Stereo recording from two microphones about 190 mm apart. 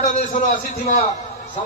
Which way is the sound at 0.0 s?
40° left (ahead or behind).